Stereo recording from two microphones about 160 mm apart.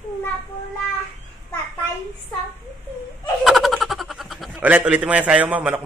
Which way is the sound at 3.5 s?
Centre (ahead or behind).